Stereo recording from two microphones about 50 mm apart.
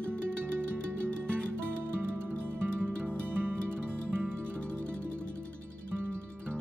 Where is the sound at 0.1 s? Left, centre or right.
Right.